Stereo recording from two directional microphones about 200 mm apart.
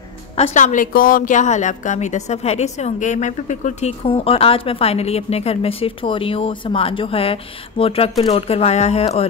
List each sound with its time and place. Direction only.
0.4 s a woman's voice: 35° left (ahead or behind)